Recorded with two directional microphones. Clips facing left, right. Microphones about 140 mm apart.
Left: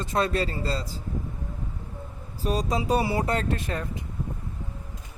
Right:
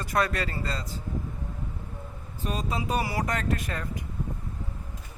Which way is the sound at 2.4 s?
35° left (ahead or behind).